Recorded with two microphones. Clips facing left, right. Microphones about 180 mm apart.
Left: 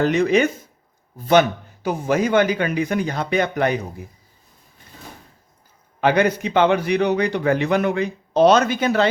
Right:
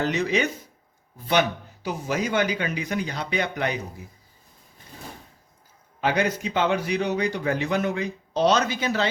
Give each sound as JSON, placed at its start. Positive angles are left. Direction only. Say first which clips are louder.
{"t": 0.0, "sound": "speech", "louder": "left 7 dB", "side_deg": 55}
{"t": 6.0, "sound": "a man's voice", "louder": "left 6 dB", "side_deg": 60}